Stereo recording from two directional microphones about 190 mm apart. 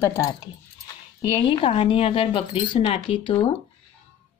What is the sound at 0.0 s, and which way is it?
Speech, 15° left (ahead or behind).